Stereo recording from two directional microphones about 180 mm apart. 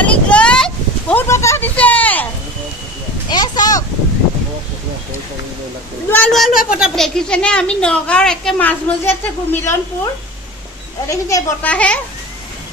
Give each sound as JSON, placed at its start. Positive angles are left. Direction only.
{"t": 0.0, "sound": "a sound", "side_deg": 5}
{"t": 3.3, "sound": "a child's voice", "side_deg": 25}
{"t": 6.0, "sound": "speech", "side_deg": 10}
{"t": 11.1, "sound": "speech", "side_deg": 15}
{"t": 11.7, "sound": "speech", "side_deg": 5}